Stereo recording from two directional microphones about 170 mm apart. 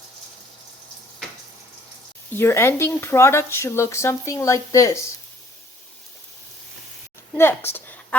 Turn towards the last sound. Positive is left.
turn(degrees=15)  # may be behind; listen again after turning